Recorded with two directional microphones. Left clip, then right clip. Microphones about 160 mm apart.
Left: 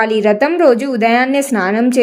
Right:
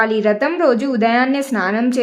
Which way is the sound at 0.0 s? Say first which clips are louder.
Left 3 dB; 20° left (ahead or behind).